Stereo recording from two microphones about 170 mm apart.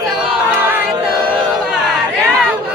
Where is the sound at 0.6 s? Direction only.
10° right (ahead or behind).